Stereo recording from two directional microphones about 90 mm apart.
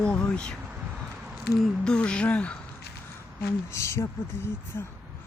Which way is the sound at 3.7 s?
30° left (ahead or behind).